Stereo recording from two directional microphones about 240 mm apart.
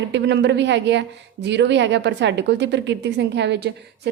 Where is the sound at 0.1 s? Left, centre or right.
Right.